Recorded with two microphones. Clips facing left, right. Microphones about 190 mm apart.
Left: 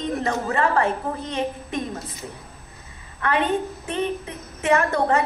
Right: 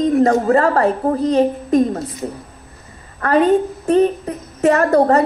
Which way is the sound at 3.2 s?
40° right (ahead or behind).